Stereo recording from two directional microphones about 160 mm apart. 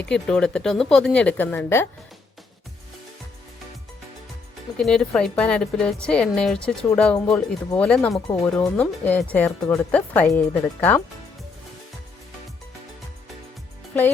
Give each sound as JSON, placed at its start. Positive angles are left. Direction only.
{"t": 0.0, "sound": "a woman's voice", "side_deg": 5}
{"t": 4.8, "sound": "a woman's voice", "side_deg": 5}
{"t": 8.3, "sound": "speech", "side_deg": 20}
{"t": 8.7, "sound": "speech", "side_deg": 10}